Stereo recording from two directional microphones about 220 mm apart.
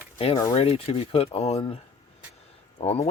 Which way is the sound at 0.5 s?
25° left (ahead or behind).